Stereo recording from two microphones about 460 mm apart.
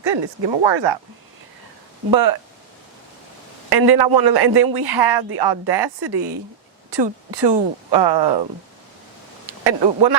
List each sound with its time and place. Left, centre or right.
0.0 s speech: right
3.7 s speech: right
9.6 s speech: right